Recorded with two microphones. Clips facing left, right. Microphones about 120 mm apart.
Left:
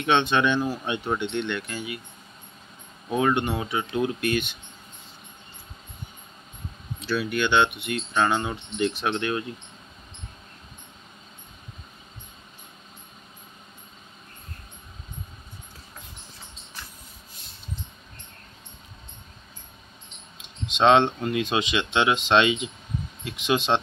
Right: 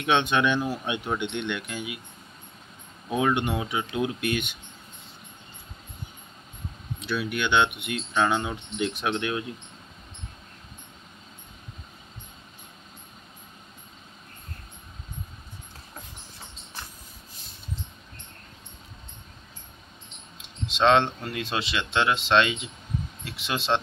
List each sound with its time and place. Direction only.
0.0 s speech: 5° right (ahead or behind)
3.1 s speech: 5° right (ahead or behind)
7.2 s speech: 10° right (ahead or behind)
20.7 s speech: 5° left (ahead or behind)